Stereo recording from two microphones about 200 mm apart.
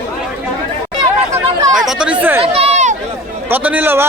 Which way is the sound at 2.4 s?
30° right (ahead or behind).